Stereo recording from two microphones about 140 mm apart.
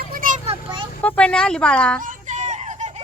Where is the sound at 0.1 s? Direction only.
80° right.